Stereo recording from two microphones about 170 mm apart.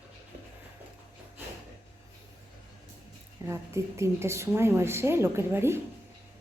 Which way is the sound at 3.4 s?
15° right (ahead or behind).